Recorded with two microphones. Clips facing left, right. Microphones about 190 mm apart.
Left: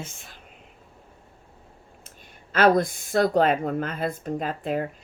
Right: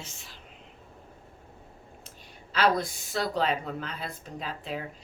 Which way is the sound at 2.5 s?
50° left (ahead or behind).